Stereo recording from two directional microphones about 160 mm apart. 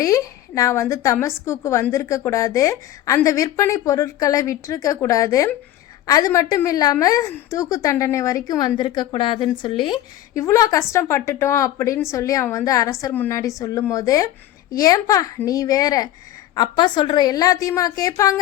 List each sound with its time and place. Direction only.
0.0 s a woman's voice: 20° left (ahead or behind)